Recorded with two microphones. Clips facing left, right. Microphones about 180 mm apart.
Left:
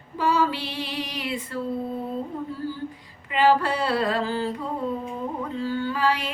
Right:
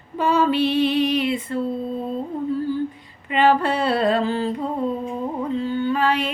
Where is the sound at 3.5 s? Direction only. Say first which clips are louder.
Right 4 dB; 25° right (ahead or behind).